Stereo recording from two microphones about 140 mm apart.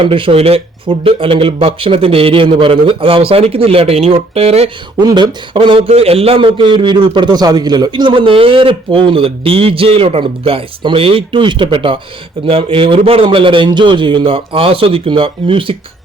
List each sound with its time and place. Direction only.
0.0 s a man's voice: 40° right (ahead or behind)
4.9 s a man's voice: 30° right (ahead or behind)